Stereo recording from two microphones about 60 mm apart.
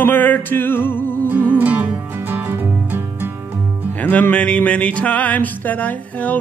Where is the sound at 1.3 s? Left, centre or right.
Right.